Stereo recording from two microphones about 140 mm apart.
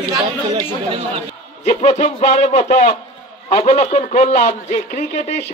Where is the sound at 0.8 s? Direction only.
40° right (ahead or behind).